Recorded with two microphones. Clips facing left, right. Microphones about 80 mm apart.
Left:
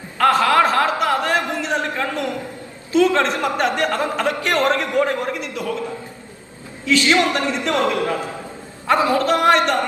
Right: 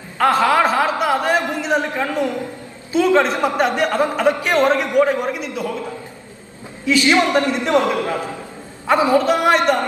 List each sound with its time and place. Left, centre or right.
0.3 s chuckle: right
0.7 s a sound: centre
1.8 s speech: centre
6.8 s a man's voice: right